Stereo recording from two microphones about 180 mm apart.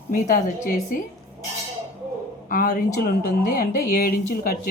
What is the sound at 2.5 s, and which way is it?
Speech, 50° left (ahead or behind).